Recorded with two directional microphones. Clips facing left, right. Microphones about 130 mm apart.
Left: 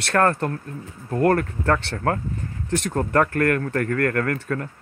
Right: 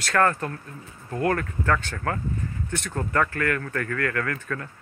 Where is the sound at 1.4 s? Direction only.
35° left (ahead or behind).